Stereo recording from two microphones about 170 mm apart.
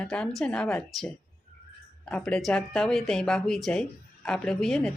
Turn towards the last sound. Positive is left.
turn(degrees=0)  # may be behind; listen again after turning